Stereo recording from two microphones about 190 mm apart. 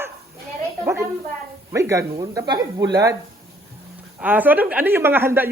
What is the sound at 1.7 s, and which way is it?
Speech, 15° right (ahead or behind).